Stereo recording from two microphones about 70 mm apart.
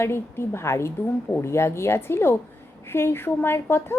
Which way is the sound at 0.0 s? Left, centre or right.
Left.